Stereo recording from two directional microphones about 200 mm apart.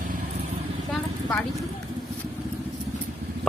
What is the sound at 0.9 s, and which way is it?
Vehicle, 5° left (ahead or behind).